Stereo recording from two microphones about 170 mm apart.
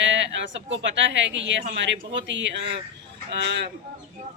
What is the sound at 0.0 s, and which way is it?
Speech, 90° right.